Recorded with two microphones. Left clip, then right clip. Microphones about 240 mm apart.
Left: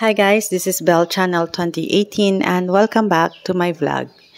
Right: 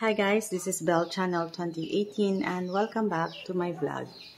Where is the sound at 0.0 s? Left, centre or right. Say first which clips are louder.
Left 12 dB; left.